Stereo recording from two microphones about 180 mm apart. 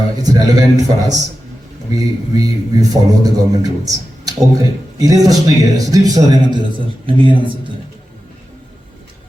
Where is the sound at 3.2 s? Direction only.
20° right (ahead or behind).